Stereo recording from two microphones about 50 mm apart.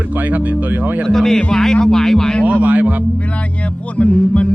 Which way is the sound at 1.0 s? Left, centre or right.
Centre.